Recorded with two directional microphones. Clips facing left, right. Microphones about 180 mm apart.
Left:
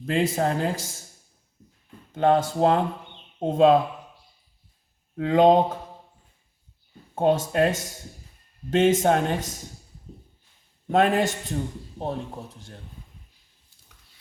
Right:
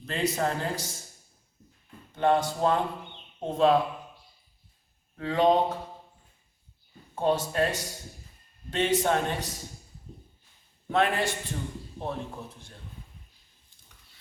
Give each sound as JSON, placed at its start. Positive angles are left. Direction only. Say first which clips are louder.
{"t": 0.0, "sound": "a man's voice", "louder": "left 5 dB", "side_deg": 50}
{"t": 2.1, "sound": "a man's voice", "louder": "left 4 dB", "side_deg": 50}
{"t": 5.1, "sound": "a man's voice", "louder": "left 6 dB", "side_deg": 50}
{"t": 7.2, "sound": "a man's voice", "louder": "left 5 dB", "side_deg": 50}
{"t": 10.8, "sound": "a man's voice", "louder": "left 5 dB", "side_deg": 45}